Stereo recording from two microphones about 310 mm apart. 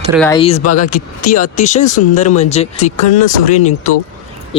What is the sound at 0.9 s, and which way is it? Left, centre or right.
Speech, left.